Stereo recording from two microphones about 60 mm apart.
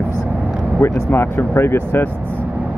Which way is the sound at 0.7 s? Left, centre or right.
Left.